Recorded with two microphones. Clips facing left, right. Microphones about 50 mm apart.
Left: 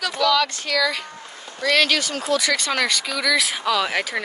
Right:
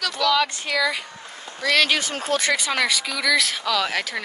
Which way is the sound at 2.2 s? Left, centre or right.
Right.